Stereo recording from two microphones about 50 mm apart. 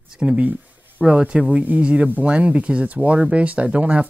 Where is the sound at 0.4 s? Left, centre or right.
Right.